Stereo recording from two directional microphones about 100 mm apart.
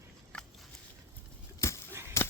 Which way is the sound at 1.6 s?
30° left (ahead or behind).